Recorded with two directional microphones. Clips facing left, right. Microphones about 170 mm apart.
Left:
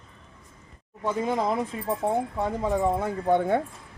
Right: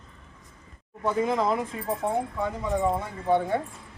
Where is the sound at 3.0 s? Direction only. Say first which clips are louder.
Left 2 dB; 50° left (ahead or behind).